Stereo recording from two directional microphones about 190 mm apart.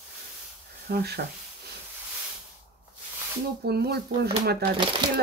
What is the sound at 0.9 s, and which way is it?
Speech, 60° right (ahead or behind).